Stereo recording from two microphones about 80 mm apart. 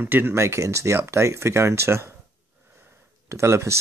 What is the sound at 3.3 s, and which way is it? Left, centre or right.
Speech, right.